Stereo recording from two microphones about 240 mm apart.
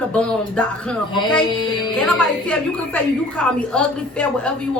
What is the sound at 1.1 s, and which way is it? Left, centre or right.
Speech, centre.